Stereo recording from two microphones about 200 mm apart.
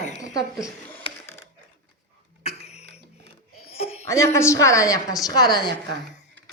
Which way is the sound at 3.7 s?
30° left (ahead or behind).